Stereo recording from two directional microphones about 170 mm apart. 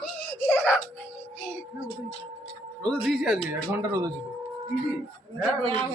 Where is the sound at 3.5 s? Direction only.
15° right (ahead or behind).